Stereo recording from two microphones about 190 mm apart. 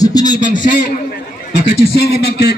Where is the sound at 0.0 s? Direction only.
20° left (ahead or behind).